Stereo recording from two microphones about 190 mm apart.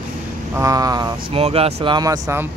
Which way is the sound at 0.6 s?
20° right (ahead or behind).